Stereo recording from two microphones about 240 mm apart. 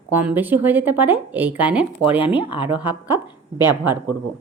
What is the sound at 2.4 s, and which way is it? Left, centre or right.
Speech, left.